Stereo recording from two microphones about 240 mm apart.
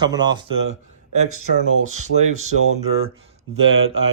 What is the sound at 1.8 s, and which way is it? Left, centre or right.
Speech, right.